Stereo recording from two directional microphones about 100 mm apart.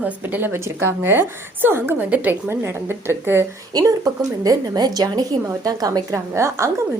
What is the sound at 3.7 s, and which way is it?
A woman's voice, 40° right (ahead or behind).